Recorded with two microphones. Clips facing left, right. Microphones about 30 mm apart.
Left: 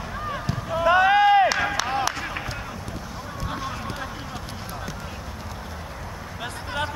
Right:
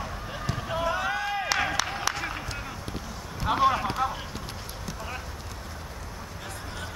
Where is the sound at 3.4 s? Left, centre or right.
Right.